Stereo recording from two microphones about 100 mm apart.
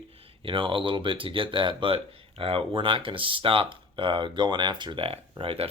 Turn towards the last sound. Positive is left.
turn(degrees=-70)  # may be behind; listen again after turning